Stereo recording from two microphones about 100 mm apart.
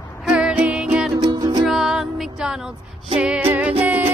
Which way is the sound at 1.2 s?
45° right (ahead or behind).